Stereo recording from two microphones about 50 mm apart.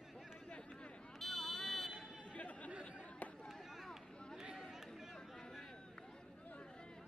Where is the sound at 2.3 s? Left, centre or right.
Left.